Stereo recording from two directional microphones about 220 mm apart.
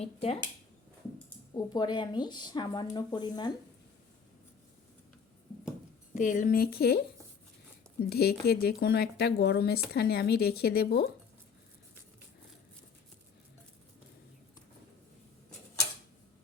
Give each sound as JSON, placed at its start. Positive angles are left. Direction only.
{"t": 0.0, "sound": "a woman's voice", "side_deg": 25}
{"t": 1.5, "sound": "a woman's voice", "side_deg": 20}
{"t": 6.1, "sound": "speech", "side_deg": 35}
{"t": 8.1, "sound": "speech", "side_deg": 45}